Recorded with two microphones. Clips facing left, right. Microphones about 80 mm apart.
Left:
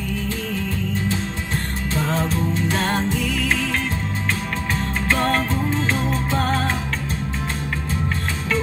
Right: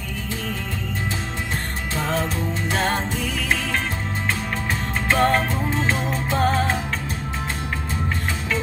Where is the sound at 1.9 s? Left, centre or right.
Centre.